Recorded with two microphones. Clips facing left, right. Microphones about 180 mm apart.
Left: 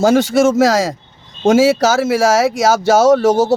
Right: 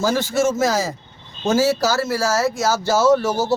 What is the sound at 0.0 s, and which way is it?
Speech, 80° left.